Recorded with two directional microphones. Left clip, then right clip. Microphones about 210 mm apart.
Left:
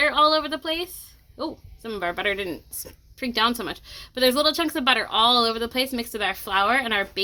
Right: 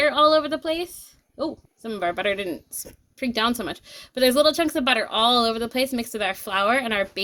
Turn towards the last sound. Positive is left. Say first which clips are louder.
# even
turn(degrees=-30)  # may be behind; listen again after turning